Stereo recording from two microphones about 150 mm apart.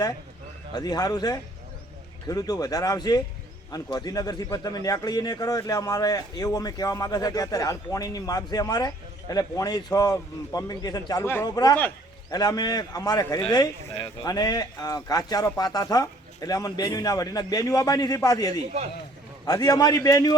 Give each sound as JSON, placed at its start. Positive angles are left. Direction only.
{"t": 0.7, "sound": "speech", "side_deg": 25}